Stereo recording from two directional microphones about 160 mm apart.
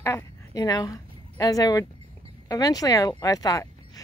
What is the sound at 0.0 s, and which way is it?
A woman's voice, 20° left (ahead or behind).